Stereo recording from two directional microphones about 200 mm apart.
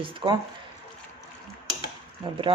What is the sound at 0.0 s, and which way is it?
Speech, 25° right (ahead or behind).